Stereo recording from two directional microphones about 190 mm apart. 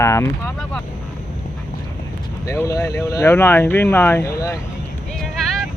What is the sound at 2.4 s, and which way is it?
Speech, 15° left (ahead or behind).